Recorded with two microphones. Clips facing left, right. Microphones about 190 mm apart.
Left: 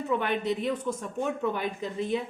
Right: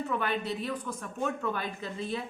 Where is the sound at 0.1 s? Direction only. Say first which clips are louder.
Left 8 dB; 20° left (ahead or behind).